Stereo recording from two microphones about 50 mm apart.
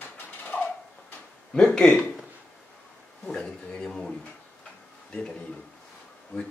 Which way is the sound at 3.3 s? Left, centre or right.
Centre.